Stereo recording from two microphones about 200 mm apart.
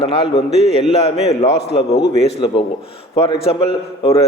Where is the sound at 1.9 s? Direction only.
55° left (ahead or behind).